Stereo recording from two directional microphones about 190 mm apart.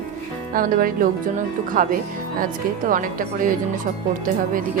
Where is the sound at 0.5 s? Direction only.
50° right (ahead or behind).